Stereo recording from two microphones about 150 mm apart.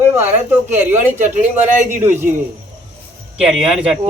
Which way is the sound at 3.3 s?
5° right (ahead or behind).